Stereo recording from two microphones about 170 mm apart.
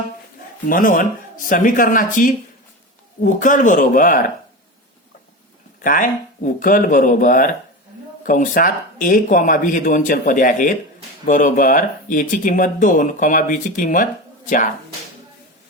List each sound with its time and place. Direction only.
0.7 s speech: 55° left (ahead or behind)
5.8 s speech: 55° left (ahead or behind)